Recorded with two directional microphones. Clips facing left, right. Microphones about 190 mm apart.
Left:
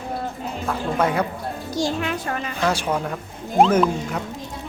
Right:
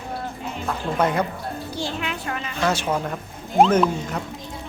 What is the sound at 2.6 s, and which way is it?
Speech, centre (ahead or behind).